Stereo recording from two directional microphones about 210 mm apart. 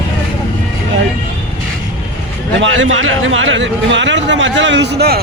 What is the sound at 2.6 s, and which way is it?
A man's voice, 65° right (ahead or behind).